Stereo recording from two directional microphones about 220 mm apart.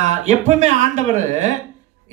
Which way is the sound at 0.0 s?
35° right (ahead or behind).